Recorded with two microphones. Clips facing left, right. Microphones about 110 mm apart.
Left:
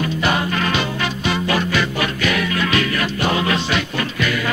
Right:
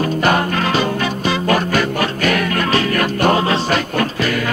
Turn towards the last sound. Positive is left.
turn(degrees=-40)  # may be behind; listen again after turning